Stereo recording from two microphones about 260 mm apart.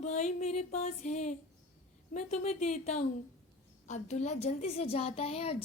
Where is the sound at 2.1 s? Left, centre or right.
Left.